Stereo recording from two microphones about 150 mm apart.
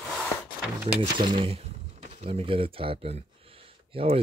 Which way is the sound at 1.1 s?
35° right (ahead or behind).